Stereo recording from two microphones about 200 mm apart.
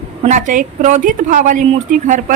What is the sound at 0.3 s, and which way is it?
A woman's voice, 40° right (ahead or behind).